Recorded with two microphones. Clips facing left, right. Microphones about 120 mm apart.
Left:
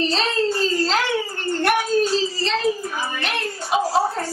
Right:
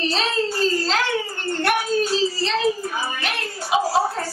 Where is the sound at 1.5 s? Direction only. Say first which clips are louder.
Left 2 dB; centre (ahead or behind).